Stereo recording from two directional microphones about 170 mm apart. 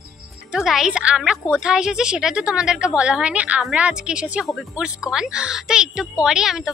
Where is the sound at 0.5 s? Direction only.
5° right (ahead or behind).